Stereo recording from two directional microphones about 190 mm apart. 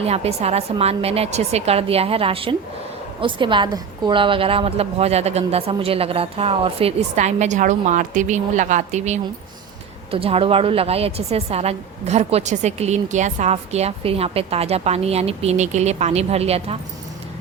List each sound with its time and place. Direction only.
0.0 s a woman's voice: 35° right (ahead or behind)